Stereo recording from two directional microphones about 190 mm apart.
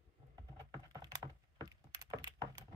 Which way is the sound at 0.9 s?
20° right (ahead or behind).